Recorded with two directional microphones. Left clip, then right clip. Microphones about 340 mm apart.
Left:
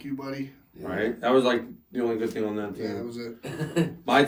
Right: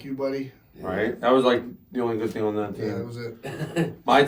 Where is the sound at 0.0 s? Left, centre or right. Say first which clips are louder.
Right 6 dB; centre.